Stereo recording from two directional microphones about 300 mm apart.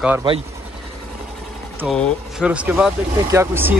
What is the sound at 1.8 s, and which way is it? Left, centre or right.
Speech, centre.